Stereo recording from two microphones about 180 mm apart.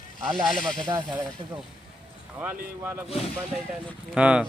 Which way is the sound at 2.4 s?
10° right (ahead or behind).